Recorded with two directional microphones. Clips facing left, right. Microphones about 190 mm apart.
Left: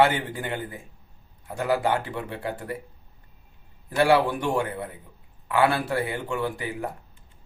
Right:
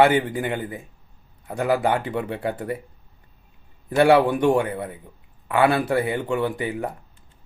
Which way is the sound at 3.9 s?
20° right (ahead or behind).